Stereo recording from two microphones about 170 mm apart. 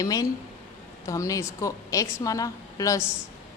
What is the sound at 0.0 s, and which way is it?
A woman's voice, 20° left (ahead or behind).